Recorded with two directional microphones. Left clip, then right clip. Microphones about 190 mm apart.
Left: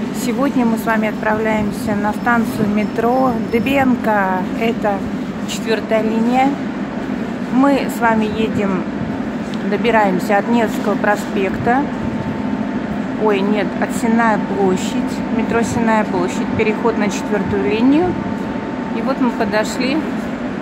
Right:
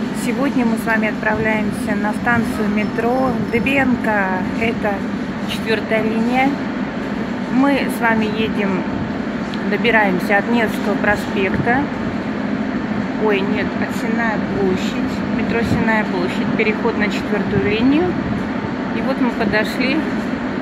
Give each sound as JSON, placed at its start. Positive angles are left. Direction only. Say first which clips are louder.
{"t": 0.8, "sound": "speech", "louder": "left 1 dB", "side_deg": 10}
{"t": 3.5, "sound": "speech", "louder": "even", "side_deg": 15}
{"t": 7.6, "sound": "speech", "louder": "left 2 dB", "side_deg": 10}
{"t": 9.7, "sound": "speech", "louder": "left 1 dB", "side_deg": 10}
{"t": 16.5, "sound": "speech", "louder": "left 2 dB", "side_deg": 10}
{"t": 19.5, "sound": "speech", "louder": "even", "side_deg": 10}